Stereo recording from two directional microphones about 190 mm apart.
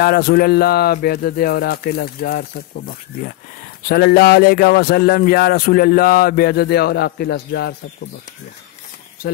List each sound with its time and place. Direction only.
0.0 s speech: 55° left (ahead or behind)